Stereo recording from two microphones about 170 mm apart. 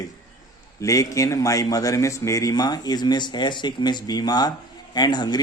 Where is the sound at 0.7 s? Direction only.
20° left (ahead or behind).